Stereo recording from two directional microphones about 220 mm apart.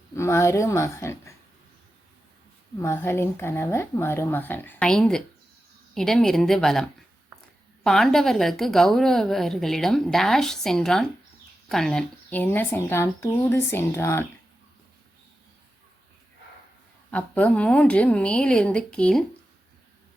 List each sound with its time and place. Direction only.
0.2 s speech: 10° left (ahead or behind)
2.8 s a woman's voice: 10° left (ahead or behind)
17.1 s a woman's voice: 5° left (ahead or behind)